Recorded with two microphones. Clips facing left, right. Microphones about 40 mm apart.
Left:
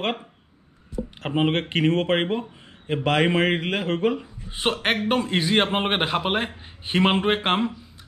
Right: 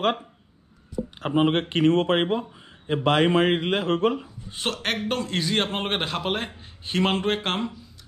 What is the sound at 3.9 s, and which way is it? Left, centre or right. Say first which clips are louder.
A man's voice: even; left.